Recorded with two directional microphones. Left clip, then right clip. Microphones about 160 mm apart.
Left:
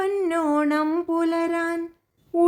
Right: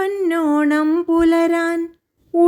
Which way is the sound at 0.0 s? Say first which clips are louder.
Right 4 dB; 25° right (ahead or behind).